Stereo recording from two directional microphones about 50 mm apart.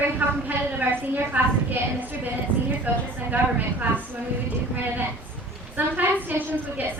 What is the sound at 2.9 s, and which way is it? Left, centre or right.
Speech, right.